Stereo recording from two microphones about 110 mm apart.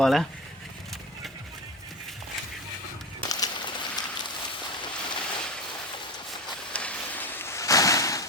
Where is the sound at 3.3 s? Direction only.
40° left (ahead or behind).